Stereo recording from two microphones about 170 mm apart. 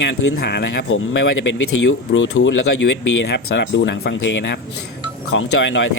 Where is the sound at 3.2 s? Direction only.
90° left.